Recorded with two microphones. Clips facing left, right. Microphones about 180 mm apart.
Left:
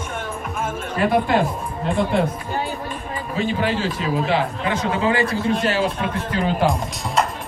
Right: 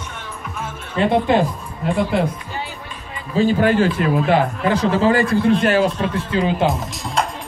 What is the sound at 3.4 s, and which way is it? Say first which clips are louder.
A man's voice: right 7 dB; 45° right (ahead or behind).